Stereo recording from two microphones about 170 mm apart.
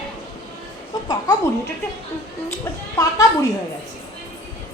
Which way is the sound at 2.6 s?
15° left (ahead or behind).